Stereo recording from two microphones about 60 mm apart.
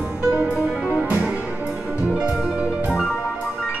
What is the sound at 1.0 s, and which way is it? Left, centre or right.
Music, right.